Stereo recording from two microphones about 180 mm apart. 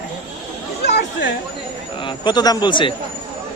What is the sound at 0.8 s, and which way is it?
Chatter, 70° left (ahead or behind).